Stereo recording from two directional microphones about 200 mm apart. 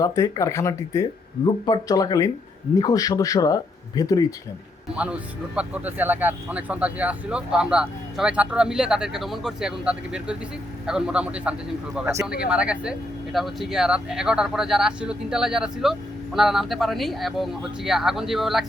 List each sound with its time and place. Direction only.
0.0 s speech: 15° left (ahead or behind)
4.9 s speech: 5° right (ahead or behind)